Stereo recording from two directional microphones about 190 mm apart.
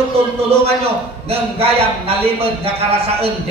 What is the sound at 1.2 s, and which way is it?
A man's voice, 30° right (ahead or behind).